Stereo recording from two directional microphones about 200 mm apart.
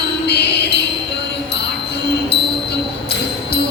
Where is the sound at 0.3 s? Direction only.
55° left (ahead or behind).